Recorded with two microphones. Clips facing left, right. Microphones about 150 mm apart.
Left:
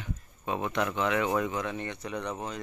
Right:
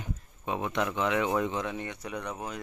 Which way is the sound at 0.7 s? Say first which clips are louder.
Even; 15° right (ahead or behind).